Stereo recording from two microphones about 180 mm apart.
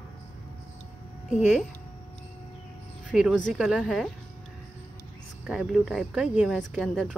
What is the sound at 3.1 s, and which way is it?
Speech, 5° right (ahead or behind).